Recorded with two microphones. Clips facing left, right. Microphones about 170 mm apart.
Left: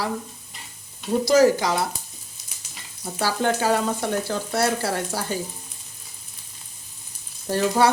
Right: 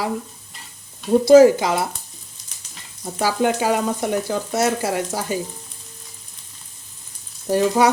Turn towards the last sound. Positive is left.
turn(degrees=-10)  # may be behind; listen again after turning